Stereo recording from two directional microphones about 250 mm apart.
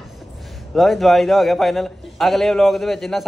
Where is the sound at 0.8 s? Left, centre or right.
Centre.